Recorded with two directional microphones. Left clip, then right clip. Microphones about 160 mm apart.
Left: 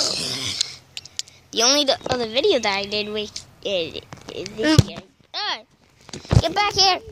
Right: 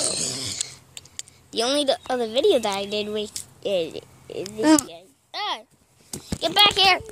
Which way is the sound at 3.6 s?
10° right (ahead or behind).